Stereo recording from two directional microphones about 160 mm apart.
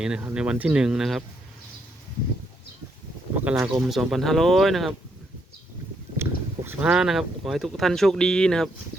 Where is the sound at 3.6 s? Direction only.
20° right (ahead or behind).